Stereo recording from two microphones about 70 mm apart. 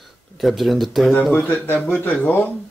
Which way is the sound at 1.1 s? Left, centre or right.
Centre.